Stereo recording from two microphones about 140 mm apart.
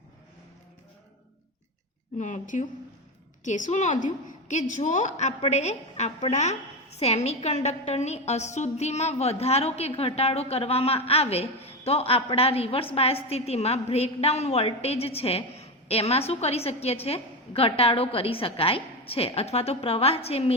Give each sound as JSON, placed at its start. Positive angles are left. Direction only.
{"t": 2.1, "sound": "a woman's voice", "side_deg": 60}